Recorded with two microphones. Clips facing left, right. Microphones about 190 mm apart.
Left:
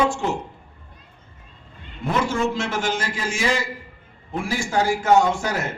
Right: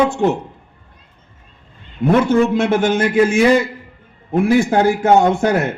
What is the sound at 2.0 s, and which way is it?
A man's voice, 60° right (ahead or behind).